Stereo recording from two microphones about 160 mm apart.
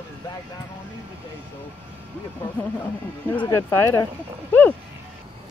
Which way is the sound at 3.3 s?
20° left (ahead or behind).